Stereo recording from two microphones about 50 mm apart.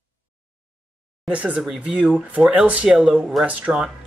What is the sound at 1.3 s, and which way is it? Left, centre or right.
Speech, right.